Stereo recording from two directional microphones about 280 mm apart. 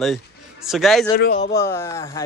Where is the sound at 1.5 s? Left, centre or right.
Centre.